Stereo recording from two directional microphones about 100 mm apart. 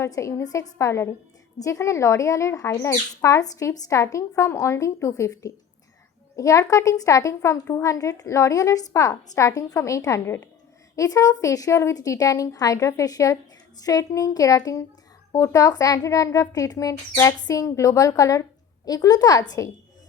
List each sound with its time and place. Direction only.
0.0 s a woman's voice: 30° left (ahead or behind)
10.9 s a woman's voice: 35° left (ahead or behind)